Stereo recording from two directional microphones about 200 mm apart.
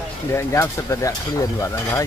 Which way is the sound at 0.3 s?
15° left (ahead or behind).